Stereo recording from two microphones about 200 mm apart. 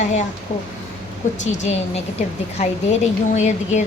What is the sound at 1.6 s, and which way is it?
Speech, 35° left (ahead or behind).